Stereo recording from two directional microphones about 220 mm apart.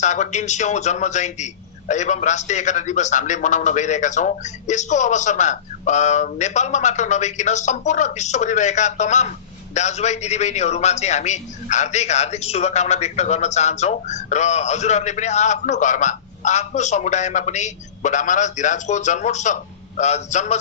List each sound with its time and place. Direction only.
0.0 s a man's voice: 35° left (ahead or behind)